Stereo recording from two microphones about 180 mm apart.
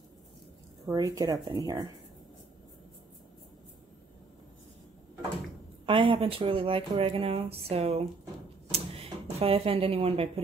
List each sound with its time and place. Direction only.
0.8 s speech: 20° right (ahead or behind)
5.9 s speech: 30° right (ahead or behind)
8.7 s a sound: 35° right (ahead or behind)